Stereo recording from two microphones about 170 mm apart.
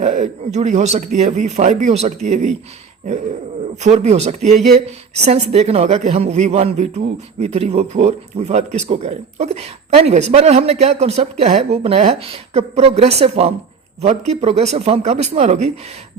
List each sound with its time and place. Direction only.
0.0 s speech: 45° right (ahead or behind)
3.8 s a man's voice: 40° right (ahead or behind)